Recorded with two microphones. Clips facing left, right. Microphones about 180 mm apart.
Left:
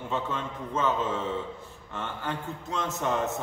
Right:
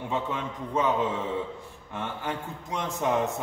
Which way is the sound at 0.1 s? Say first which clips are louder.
Even; 15° right (ahead or behind).